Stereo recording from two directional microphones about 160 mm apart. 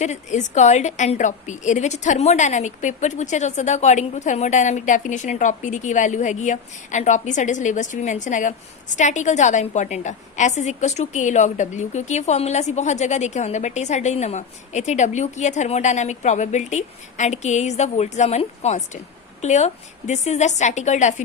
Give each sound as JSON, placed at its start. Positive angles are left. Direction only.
{"t": 0.0, "sound": "a woman's voice", "side_deg": 45}